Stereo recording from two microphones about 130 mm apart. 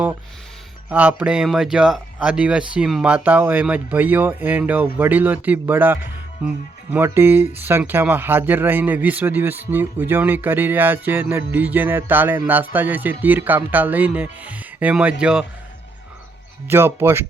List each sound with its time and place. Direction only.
0.9 s speech: 10° right (ahead or behind)
16.6 s speech: 20° right (ahead or behind)